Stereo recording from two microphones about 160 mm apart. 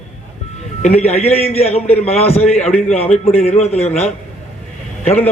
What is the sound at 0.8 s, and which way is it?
A man's voice, 40° left (ahead or behind).